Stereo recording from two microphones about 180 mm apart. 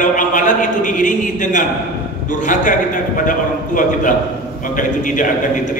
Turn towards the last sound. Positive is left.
turn(degrees=45)  # may be behind; listen again after turning